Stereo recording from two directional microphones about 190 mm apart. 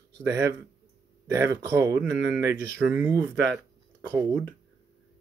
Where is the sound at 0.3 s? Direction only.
15° right (ahead or behind).